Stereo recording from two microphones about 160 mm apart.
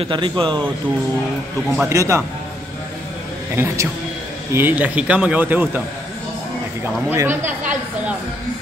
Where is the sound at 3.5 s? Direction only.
15° right (ahead or behind).